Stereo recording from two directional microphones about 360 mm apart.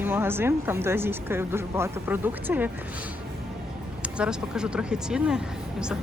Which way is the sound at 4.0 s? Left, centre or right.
Centre.